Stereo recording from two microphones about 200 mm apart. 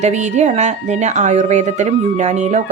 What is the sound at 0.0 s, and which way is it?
A woman's voice, 35° right (ahead or behind).